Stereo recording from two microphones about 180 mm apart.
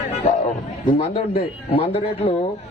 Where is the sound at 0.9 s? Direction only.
30° left (ahead or behind).